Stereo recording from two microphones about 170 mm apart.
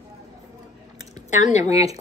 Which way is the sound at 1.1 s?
45° left (ahead or behind).